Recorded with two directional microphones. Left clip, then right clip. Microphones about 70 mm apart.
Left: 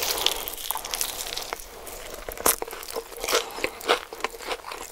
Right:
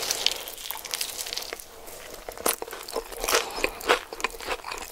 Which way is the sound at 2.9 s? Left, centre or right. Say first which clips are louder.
Right 1 dB; right.